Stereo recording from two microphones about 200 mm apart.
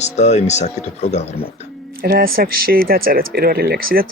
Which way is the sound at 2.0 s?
50° right (ahead or behind).